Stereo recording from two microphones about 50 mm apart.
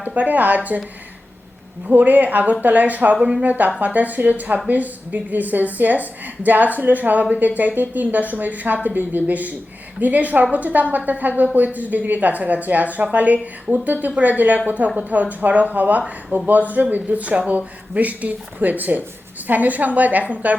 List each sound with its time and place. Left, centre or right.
0.0 s speech: right
1.9 s a woman's voice: right